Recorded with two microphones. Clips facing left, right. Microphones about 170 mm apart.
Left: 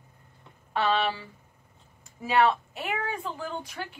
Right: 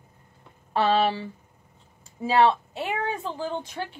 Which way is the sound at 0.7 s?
35° right (ahead or behind).